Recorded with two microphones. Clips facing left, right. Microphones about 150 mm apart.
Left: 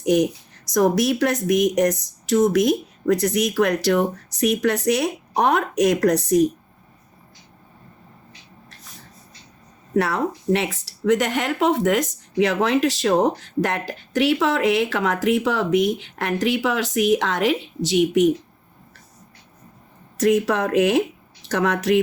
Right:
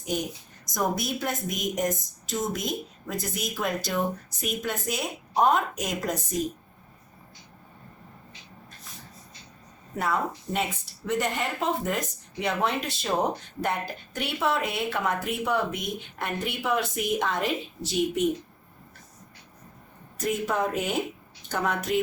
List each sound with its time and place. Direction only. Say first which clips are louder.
0.0 s speech: left 12 dB; 75° left (ahead or behind)
9.9 s speech: left 7 dB; 90° left
20.1 s speech: left 8 dB; 85° left